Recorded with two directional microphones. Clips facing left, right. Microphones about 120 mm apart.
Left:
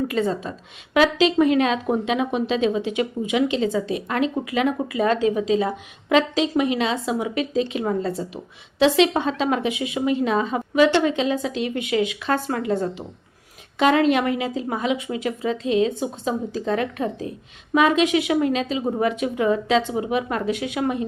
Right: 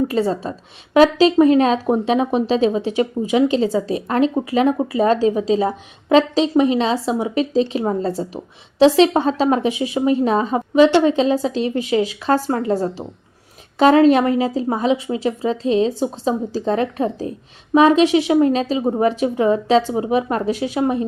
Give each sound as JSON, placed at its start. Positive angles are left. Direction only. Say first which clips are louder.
{"t": 0.1, "sound": "a woman's voice", "louder": "right 4 dB", "side_deg": -35}